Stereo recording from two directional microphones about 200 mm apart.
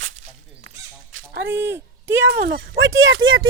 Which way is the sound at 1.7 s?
10° right (ahead or behind).